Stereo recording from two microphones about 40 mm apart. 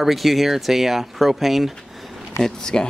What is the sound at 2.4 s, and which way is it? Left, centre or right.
Speech, centre.